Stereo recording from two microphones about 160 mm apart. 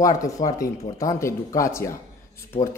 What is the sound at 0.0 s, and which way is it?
A man's voice, 20° left (ahead or behind).